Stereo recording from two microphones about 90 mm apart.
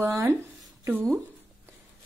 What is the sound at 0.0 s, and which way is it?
Speech, 30° right (ahead or behind).